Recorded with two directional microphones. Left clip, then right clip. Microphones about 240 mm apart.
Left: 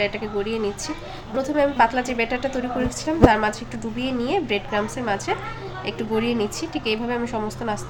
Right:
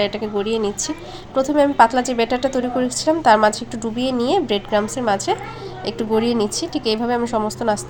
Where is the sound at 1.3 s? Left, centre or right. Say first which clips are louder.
Right 5 dB; centre.